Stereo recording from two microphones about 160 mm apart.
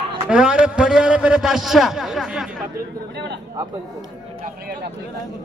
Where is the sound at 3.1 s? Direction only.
90° right.